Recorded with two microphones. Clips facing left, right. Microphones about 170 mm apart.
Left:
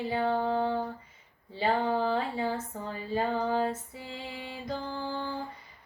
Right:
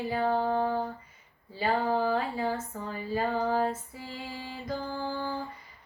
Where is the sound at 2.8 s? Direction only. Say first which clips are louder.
Even; 25° left (ahead or behind).